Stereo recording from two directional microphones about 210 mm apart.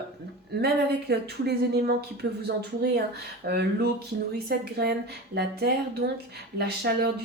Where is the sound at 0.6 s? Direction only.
50° right (ahead or behind).